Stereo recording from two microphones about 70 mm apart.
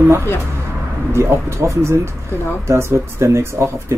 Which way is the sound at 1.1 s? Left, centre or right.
Right.